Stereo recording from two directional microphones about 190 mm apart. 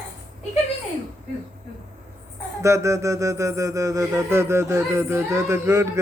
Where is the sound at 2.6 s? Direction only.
15° right (ahead or behind).